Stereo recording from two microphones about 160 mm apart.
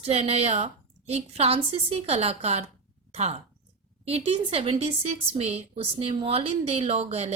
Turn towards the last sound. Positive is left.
turn(degrees=-40)  # may be behind; listen again after turning